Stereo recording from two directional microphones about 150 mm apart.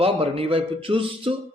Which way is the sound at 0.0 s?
40° right (ahead or behind).